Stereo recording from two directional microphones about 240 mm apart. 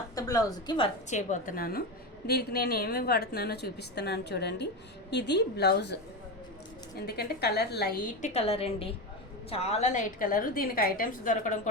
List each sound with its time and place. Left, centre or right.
0.2 s a woman's voice: centre
1.1 s a woman's voice: left
7.1 s a woman's voice: left